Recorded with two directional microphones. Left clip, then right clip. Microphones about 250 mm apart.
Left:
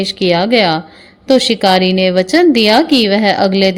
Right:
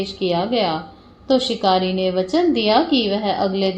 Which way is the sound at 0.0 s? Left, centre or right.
Left.